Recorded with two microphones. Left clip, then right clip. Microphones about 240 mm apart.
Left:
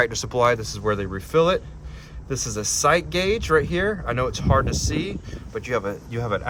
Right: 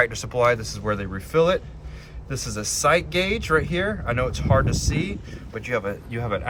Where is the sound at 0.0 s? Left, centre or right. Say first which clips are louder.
Even; left.